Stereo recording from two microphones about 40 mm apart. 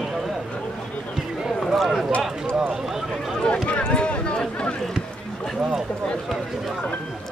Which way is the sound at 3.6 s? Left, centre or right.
Left.